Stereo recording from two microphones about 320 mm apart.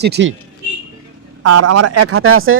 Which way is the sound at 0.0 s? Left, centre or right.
Right.